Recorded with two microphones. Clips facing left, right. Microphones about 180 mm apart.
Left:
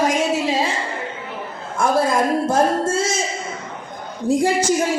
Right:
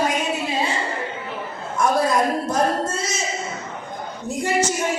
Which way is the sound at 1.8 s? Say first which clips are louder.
Left 1 dB; 25° left (ahead or behind).